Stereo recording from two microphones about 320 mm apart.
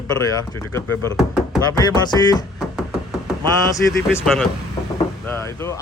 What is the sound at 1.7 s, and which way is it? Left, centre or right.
Speech, centre.